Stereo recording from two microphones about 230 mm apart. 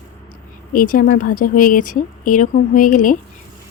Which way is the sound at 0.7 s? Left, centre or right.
Left.